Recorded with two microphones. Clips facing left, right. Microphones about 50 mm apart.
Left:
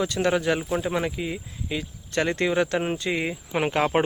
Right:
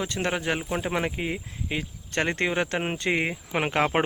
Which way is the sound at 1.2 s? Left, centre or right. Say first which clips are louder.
Even; right.